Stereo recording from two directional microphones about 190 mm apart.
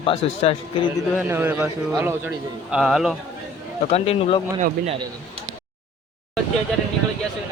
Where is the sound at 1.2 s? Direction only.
10° right (ahead or behind).